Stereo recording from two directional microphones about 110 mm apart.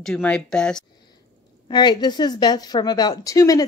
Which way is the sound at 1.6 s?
40° left (ahead or behind).